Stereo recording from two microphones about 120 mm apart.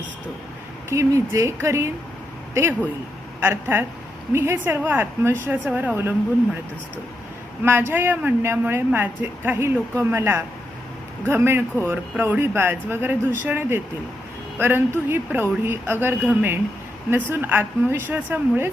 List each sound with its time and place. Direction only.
0.9 s speech: 25° right (ahead or behind)
3.4 s speech: 15° right (ahead or behind)
7.6 s speech: 20° right (ahead or behind)